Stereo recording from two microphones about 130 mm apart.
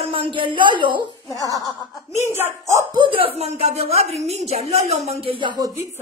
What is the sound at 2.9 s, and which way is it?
Speech, 40° right (ahead or behind).